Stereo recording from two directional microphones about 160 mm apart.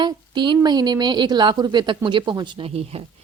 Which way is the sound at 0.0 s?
30° right (ahead or behind).